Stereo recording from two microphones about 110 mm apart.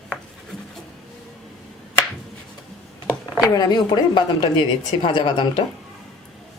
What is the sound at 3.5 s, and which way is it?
Speech, 35° left (ahead or behind).